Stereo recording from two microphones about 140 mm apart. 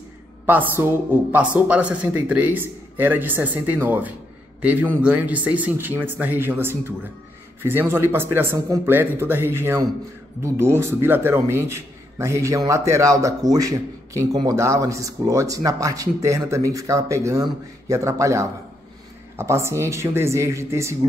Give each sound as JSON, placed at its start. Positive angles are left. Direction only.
{"t": 0.5, "sound": "a man's voice", "side_deg": -15}